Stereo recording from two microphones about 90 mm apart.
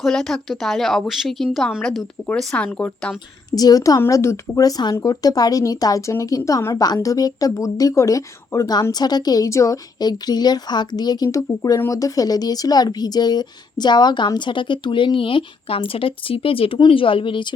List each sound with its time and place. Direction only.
0.0 s speech: 5° left (ahead or behind)
3.5 s speech: 45° left (ahead or behind)
4.0 s speech: 30° left (ahead or behind)
4.6 s speech: 50° left (ahead or behind); by 6.7 s 30° left (ahead or behind)
6.7 s speech: 45° left (ahead or behind); by 17.5 s 65° left (ahead or behind)